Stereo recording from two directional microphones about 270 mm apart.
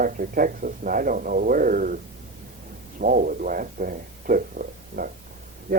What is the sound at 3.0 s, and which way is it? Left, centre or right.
Speech, right.